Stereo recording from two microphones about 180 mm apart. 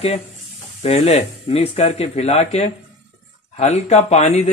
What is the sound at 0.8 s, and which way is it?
Speech, 35° left (ahead or behind).